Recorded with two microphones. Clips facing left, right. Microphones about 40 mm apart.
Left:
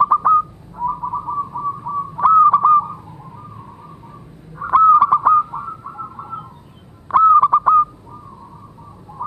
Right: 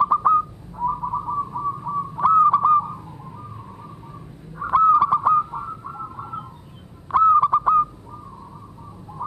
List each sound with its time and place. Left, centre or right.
0.0 s whistling: centre
2.2 s honk: centre
4.7 s bird: left; by 6.4 s centre
7.1 s fowl: left